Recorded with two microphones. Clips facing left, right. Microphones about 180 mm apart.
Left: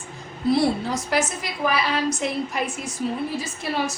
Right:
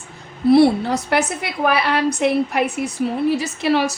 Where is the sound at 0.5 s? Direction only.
65° right (ahead or behind).